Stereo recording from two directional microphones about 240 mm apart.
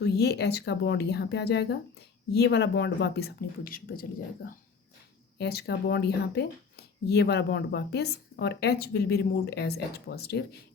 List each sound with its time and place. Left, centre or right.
0.0 s speech: left
5.4 s speech: left